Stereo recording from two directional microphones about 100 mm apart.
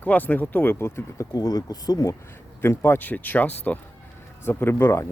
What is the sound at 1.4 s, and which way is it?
Speech, 40° left (ahead or behind).